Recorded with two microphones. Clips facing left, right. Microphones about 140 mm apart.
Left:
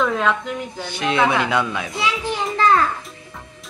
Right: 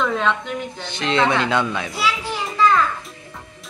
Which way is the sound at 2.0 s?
20° left (ahead or behind).